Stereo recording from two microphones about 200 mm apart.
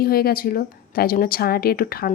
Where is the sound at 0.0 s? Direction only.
50° left (ahead or behind).